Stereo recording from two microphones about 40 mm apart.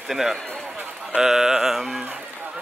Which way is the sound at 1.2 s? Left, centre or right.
Centre.